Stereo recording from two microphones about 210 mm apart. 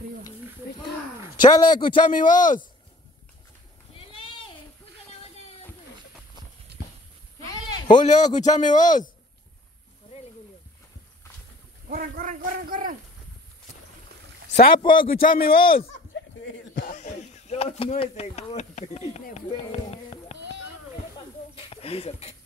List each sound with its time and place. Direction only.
1.4 s a man's voice: 25° left (ahead or behind)
2.1 s a man's voice: 40° left (ahead or behind)
8.0 s a man's voice: 35° left (ahead or behind)
11.9 s a man's voice: 40° right (ahead or behind)
14.5 s speech: 45° left (ahead or behind)
14.8 s a man's voice: 25° left (ahead or behind)
15.2 s speech: 45° left (ahead or behind)
16.8 s speech: 35° left (ahead or behind)
19.9 s a sound: 30° left (ahead or behind)
21.5 s a sound: 25° left (ahead or behind)